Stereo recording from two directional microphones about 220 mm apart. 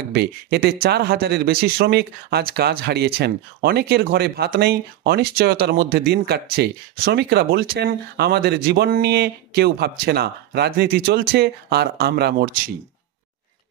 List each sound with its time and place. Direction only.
0.1 s speech: 50° right (ahead or behind)